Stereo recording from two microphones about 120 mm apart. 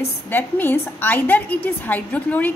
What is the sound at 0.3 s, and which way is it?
A woman's voice, 15° left (ahead or behind).